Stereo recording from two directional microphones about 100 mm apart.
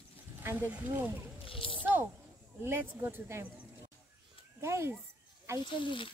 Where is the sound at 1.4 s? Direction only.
65° left (ahead or behind).